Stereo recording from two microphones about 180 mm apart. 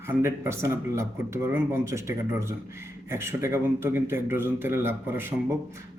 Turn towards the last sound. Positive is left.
turn(degrees=-15)  # may be behind; listen again after turning